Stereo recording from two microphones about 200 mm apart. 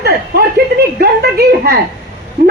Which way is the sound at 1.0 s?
50° right (ahead or behind).